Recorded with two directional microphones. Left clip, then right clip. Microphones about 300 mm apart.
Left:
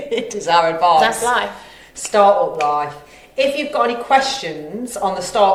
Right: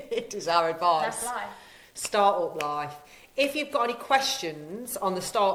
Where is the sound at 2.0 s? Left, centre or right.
Right.